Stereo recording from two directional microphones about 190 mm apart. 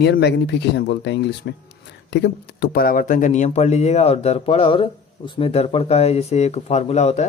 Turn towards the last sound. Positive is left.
turn(degrees=35)  # may be behind; listen again after turning